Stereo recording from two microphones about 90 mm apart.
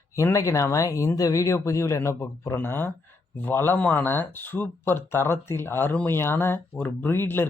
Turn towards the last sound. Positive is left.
turn(degrees=25)  # may be behind; listen again after turning